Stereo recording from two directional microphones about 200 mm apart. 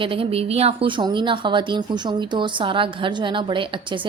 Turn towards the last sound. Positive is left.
turn(degrees=-25)  # may be behind; listen again after turning